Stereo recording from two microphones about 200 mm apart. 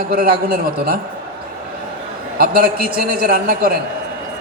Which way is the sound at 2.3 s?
45° right (ahead or behind).